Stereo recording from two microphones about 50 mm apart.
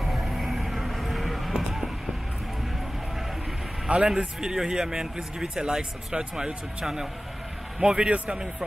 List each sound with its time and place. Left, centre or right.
0.0 s music: centre
3.9 s speech: centre